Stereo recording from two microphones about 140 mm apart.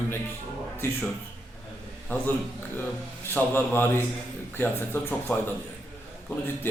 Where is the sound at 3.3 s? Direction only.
15° left (ahead or behind).